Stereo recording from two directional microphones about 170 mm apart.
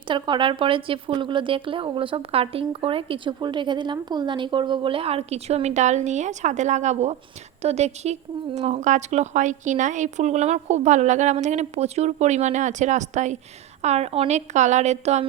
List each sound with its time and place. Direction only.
0.1 s a woman's voice: 30° right (ahead or behind)